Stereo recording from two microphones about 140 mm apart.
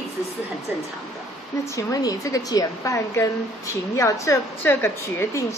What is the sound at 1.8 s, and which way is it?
A woman's voice, 25° left (ahead or behind).